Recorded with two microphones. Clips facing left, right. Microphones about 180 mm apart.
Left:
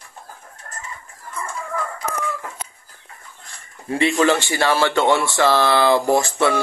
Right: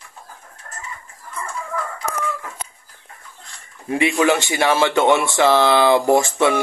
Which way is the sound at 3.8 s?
15° right (ahead or behind).